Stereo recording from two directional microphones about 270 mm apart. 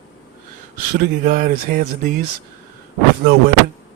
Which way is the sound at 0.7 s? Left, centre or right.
Right.